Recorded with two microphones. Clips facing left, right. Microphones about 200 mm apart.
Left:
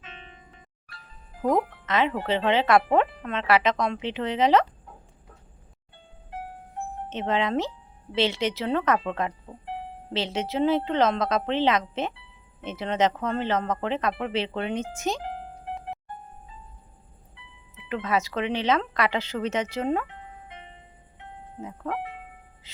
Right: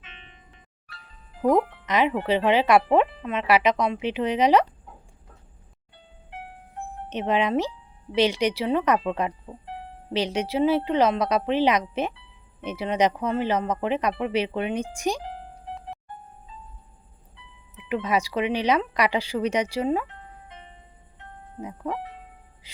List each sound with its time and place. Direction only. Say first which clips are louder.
0.0 s music: left 5 dB; 40° left (ahead or behind)
1.4 s speech: right 3 dB; 10° right (ahead or behind)
7.1 s speech: right 3 dB; 15° right (ahead or behind)
17.8 s speech: right 2 dB; 15° right (ahead or behind)
21.6 s speech: right 2 dB; 15° right (ahead or behind)
22.6 s music: right 1 dB; 15° right (ahead or behind)